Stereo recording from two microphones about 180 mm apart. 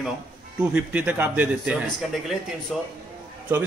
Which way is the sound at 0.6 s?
10° right (ahead or behind).